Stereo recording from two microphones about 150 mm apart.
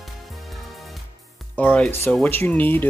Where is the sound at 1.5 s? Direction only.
10° left (ahead or behind).